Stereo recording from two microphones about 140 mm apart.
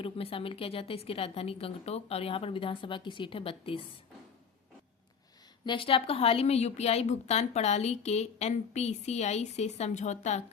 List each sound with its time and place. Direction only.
0.0 s a woman's voice: 40° left (ahead or behind)
5.6 s a woman's voice: 40° left (ahead or behind); by 10.4 s 55° left (ahead or behind)